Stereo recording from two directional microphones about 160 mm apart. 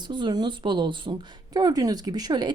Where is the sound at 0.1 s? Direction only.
30° right (ahead or behind).